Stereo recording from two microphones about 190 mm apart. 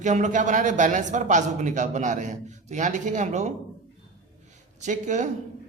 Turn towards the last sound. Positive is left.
turn(degrees=-40)  # may be behind; listen again after turning